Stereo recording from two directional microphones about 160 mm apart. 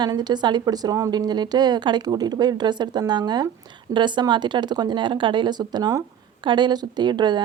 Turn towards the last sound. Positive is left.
turn(degrees=-30)  # may be behind; listen again after turning